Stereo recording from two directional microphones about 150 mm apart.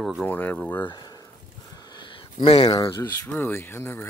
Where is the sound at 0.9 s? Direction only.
30° left (ahead or behind).